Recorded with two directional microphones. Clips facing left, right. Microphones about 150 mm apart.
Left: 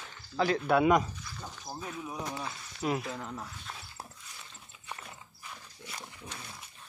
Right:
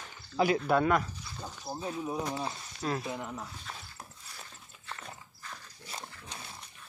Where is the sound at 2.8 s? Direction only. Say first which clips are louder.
Left 2 dB; 10° left (ahead or behind).